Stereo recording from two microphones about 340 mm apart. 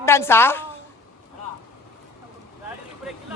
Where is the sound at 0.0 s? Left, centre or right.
Centre.